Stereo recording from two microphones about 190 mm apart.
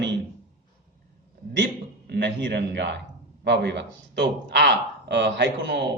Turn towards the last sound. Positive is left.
turn(degrees=-65)  # may be behind; listen again after turning